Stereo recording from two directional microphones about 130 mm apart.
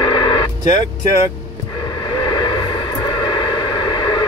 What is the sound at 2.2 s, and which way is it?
Vehicle, 35° left (ahead or behind).